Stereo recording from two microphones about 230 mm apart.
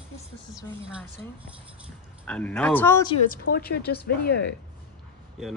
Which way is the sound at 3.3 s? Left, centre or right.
Left.